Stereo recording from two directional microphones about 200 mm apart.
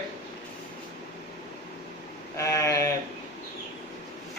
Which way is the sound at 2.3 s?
15° left (ahead or behind).